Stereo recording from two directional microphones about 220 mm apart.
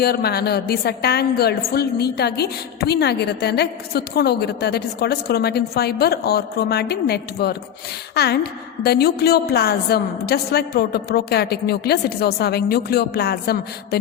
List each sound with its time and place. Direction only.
0.0 s a woman's voice: 45° left (ahead or behind)